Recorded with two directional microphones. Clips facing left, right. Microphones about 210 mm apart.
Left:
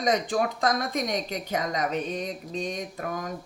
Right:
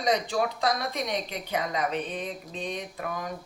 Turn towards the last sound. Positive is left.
turn(degrees=45)  # may be behind; listen again after turning